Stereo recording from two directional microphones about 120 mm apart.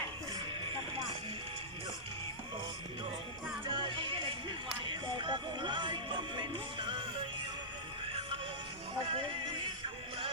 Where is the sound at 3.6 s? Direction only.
45° right (ahead or behind).